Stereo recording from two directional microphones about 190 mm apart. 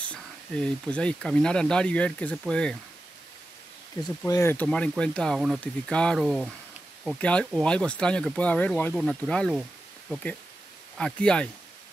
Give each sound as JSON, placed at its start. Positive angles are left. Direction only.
{"t": 0.0, "sound": "speech", "side_deg": 5}
{"t": 4.0, "sound": "speech", "side_deg": 20}